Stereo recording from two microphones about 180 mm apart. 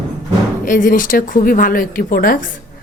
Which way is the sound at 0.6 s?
45° left (ahead or behind).